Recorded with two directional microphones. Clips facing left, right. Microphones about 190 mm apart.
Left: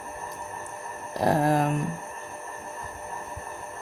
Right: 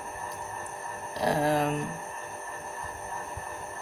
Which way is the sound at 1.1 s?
50° left (ahead or behind).